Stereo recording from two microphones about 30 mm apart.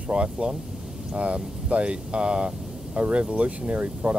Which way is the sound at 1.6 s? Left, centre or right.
Right.